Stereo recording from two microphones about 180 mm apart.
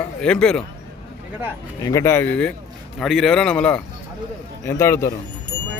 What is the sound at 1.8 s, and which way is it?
A man's voice, 15° left (ahead or behind).